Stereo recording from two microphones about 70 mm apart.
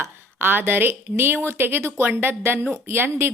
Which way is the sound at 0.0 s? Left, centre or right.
Right.